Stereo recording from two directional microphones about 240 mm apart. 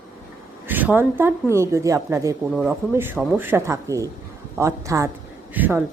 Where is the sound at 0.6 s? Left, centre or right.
Centre.